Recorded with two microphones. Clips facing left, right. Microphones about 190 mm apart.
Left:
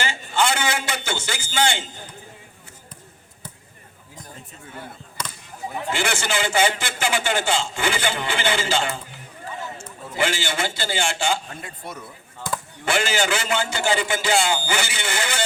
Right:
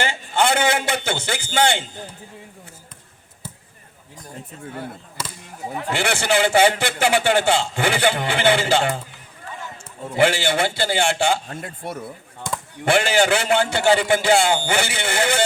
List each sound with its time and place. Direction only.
0.0 s a man's voice: 55° right (ahead or behind)
5.9 s a man's voice: 60° right (ahead or behind)
10.2 s a man's voice: 60° right (ahead or behind)